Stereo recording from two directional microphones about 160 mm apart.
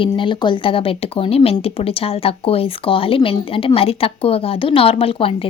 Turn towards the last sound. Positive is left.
turn(degrees=35)  # may be behind; listen again after turning